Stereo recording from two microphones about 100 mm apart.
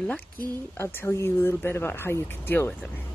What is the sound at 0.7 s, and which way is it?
Speech, 25° left (ahead or behind).